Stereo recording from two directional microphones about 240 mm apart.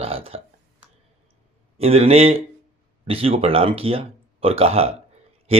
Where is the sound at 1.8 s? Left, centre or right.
Right.